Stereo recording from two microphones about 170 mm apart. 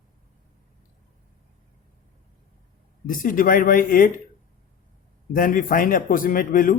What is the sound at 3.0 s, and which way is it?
Speech, 55° left (ahead or behind).